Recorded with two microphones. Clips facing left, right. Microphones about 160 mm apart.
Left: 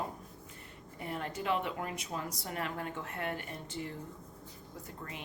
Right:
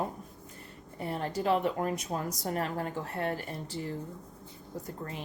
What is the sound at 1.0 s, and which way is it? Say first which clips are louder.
A woman's voice: right 5 dB; 35° right (ahead or behind).